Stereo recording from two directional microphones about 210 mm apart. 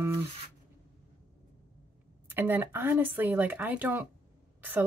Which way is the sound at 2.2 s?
10° right (ahead or behind).